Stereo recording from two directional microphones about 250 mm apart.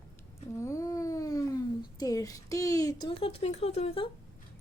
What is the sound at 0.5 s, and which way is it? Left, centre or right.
Speech, centre.